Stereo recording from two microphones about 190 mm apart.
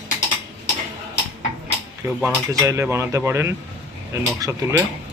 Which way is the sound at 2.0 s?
15° right (ahead or behind).